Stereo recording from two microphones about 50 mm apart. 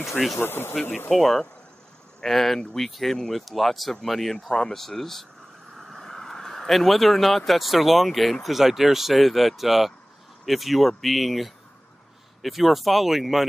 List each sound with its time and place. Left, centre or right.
0.4 s speech: left
1.1 s speech: centre